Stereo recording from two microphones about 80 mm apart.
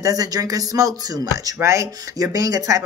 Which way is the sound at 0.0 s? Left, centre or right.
Right.